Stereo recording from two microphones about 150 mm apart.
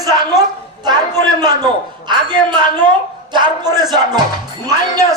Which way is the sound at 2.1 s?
30° right (ahead or behind).